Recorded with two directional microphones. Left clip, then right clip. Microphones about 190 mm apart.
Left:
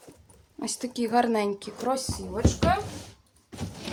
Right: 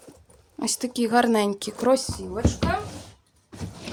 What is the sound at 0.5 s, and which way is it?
Speech, 35° right (ahead or behind).